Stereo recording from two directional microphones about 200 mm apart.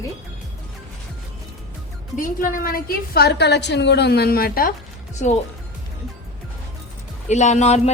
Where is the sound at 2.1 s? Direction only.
40° left (ahead or behind).